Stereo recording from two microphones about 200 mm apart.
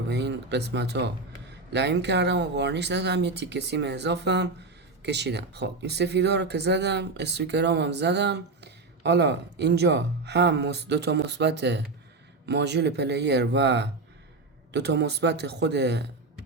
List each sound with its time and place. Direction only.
0.1 s speech: 60° right (ahead or behind)